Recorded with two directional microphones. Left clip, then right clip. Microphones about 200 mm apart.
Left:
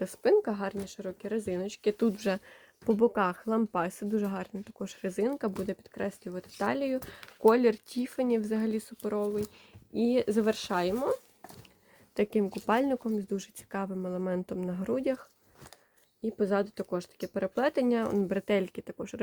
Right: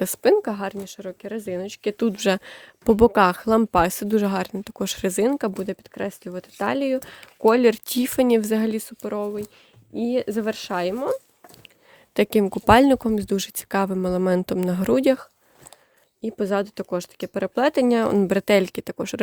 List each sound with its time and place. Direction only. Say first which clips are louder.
0.0 s speech: right 7 dB; 65° right (ahead or behind); by 9.4 s 50° right (ahead or behind)
9.9 s speech: right 3 dB; 35° right (ahead or behind)
12.1 s speech: right 9 dB; 65° right (ahead or behind)